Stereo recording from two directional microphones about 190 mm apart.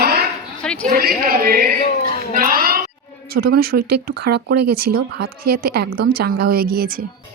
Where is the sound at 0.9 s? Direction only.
50° right (ahead or behind).